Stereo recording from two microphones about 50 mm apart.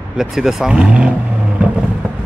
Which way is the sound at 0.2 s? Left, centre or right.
Centre.